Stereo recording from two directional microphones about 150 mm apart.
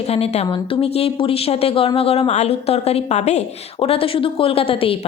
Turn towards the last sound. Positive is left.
turn(degrees=40)  # may be behind; listen again after turning